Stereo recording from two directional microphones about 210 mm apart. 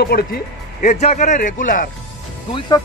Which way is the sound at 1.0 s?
35° left (ahead or behind).